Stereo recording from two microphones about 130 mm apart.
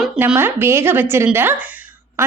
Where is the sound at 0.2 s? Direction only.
15° right (ahead or behind).